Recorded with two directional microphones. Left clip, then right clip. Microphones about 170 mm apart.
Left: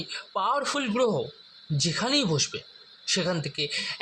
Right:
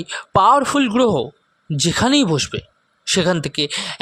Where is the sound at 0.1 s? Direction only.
85° right.